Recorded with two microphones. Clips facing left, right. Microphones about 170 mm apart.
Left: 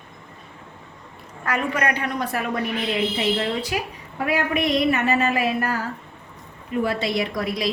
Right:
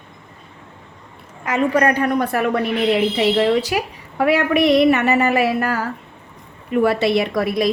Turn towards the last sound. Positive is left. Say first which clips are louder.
# right 6 dB
turn(degrees=-55)  # may be behind; listen again after turning